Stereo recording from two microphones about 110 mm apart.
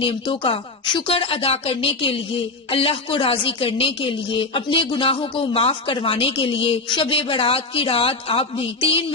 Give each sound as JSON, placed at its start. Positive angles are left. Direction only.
{"t": 0.0, "sound": "speech", "side_deg": 55}